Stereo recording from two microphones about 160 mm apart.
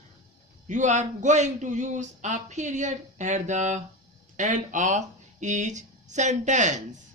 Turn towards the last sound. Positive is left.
turn(degrees=-50)  # may be behind; listen again after turning